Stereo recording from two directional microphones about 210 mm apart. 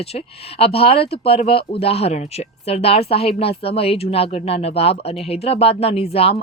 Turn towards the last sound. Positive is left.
turn(degrees=30)  # may be behind; listen again after turning